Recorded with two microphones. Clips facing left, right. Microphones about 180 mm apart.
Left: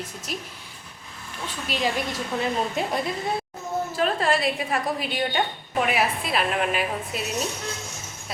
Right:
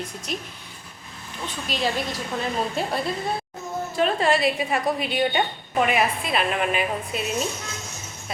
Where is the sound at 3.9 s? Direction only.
Centre (ahead or behind).